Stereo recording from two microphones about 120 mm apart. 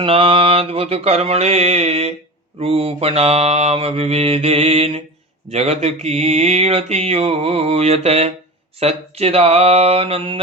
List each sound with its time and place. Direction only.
0.0 s mantra: 50° right (ahead or behind)